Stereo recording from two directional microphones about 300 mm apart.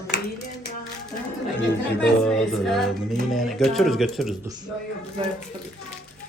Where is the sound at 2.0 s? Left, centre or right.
Centre.